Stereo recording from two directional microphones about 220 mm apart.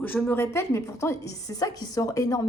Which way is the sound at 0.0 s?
10° left (ahead or behind).